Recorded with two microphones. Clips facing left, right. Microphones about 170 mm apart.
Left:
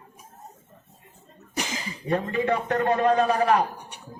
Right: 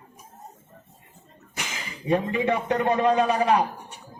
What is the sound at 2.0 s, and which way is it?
A man's voice, 15° right (ahead or behind).